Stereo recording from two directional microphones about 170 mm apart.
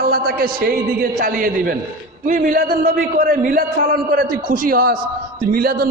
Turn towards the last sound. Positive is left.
turn(degrees=-65)  # may be behind; listen again after turning